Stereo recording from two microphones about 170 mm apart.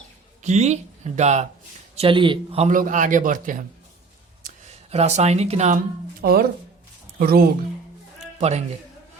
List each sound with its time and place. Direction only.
0.4 s speech: 40° right (ahead or behind)
2.0 s speech: 30° right (ahead or behind)
2.6 s a man's voice: 50° right (ahead or behind)
6.2 s speech: 65° right (ahead or behind)
8.4 s a man's voice: 40° right (ahead or behind)